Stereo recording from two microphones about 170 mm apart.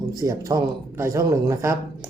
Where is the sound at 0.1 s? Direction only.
20° right (ahead or behind).